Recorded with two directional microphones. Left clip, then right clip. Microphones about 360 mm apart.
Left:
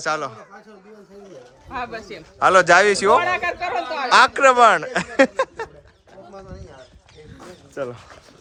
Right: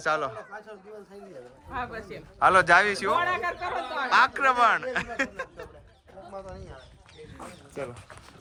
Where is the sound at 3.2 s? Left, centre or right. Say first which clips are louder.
Left 6 dB; left.